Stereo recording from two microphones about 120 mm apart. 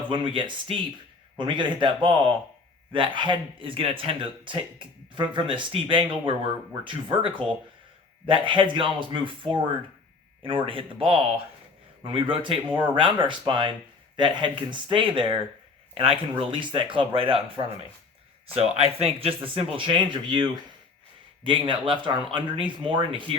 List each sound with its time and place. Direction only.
0.1 s a man's voice: 45° right (ahead or behind)
16.4 s a man's voice: 45° right (ahead or behind)